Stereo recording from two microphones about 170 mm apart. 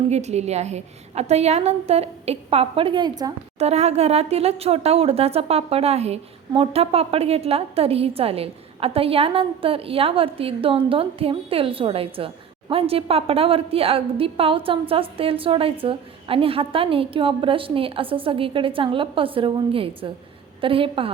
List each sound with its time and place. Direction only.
0.1 s speech: 40° right (ahead or behind); by 3.3 s 25° right (ahead or behind)
3.6 s speech: 40° right (ahead or behind)